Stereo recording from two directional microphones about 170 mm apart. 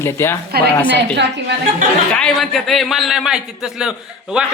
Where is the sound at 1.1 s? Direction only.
90° right.